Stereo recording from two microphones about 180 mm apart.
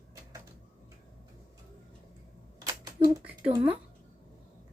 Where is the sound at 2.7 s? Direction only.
20° right (ahead or behind).